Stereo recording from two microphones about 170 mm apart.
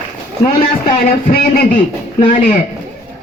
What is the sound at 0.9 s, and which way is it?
Speech, 50° left (ahead or behind).